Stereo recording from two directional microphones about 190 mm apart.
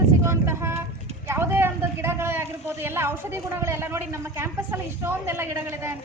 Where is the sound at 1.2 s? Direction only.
10° right (ahead or behind).